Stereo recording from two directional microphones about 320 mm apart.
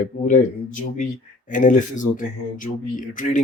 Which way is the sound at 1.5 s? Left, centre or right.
Left.